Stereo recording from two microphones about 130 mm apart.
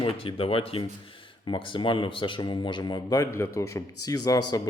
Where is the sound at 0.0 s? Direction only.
45° left (ahead or behind).